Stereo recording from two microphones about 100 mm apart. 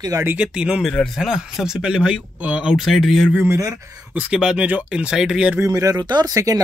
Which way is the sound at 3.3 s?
25° right (ahead or behind).